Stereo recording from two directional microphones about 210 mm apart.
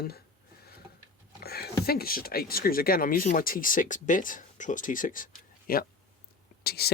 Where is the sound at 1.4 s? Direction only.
50° left (ahead or behind).